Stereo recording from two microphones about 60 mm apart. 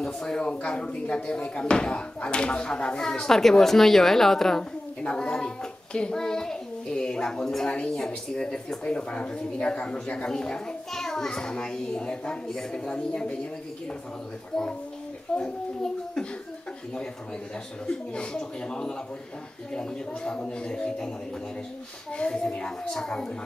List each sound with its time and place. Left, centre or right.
0.0 s speech: centre
5.0 s speech: centre
15.3 s speech: centre
17.8 s speech: centre
22.1 s speech: centre